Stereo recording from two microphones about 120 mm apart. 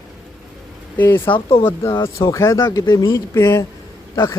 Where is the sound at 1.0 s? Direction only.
15° left (ahead or behind).